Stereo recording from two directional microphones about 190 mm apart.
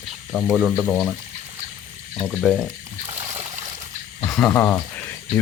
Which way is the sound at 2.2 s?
Centre (ahead or behind).